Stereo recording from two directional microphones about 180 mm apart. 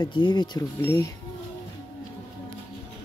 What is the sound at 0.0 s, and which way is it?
Speech, 25° left (ahead or behind).